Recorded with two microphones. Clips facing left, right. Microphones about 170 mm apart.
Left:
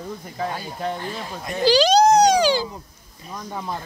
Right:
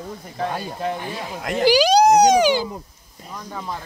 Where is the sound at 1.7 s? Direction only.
15° right (ahead or behind).